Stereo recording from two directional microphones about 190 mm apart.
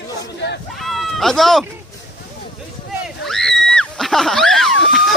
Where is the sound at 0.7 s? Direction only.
Centre (ahead or behind).